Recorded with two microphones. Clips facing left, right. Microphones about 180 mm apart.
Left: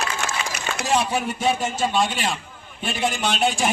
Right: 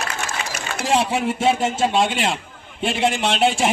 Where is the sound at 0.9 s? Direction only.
25° right (ahead or behind).